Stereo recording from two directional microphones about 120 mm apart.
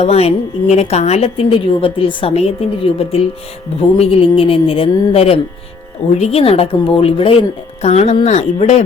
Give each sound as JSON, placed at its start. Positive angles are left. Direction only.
{"t": 0.0, "sound": "a woman's voice", "side_deg": 60}
{"t": 7.8, "sound": "speech", "side_deg": 65}